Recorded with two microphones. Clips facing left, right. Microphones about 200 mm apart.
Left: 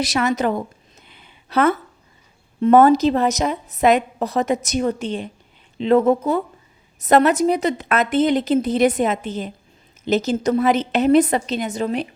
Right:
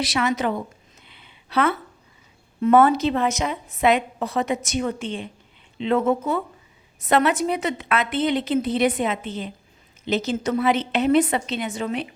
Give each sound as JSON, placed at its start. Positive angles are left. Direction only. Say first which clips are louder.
{"t": 0.0, "sound": "a woman's voice", "louder": "left 3 dB", "side_deg": 45}
{"t": 1.0, "sound": "a sound", "louder": "left 2 dB", "side_deg": 45}
{"t": 2.6, "sound": "a woman's voice", "louder": "left 4 dB", "side_deg": 35}